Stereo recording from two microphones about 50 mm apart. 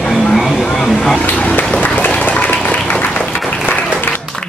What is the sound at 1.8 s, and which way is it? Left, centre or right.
Applause, left.